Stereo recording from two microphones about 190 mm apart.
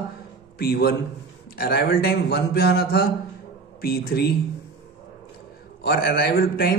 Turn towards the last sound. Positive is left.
turn(degrees=55)  # may be behind; listen again after turning